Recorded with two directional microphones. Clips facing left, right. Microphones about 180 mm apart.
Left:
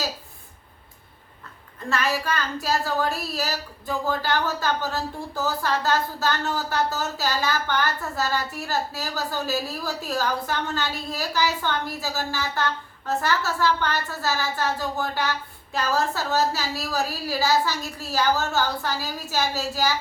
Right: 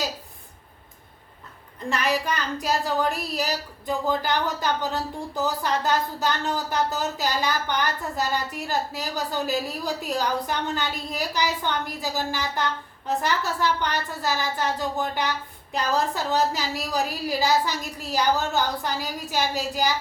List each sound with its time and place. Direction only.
1.9 s a woman's voice: 15° right (ahead or behind)